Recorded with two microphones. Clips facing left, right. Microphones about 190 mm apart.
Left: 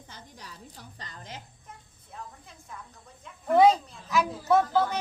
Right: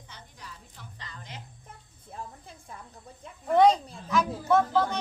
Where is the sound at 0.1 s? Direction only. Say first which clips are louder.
Even; 40° left (ahead or behind).